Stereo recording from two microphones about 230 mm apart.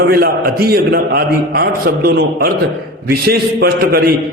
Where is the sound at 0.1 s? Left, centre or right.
Right.